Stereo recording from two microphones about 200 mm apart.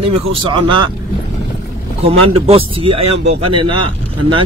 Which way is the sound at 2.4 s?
30° right (ahead or behind).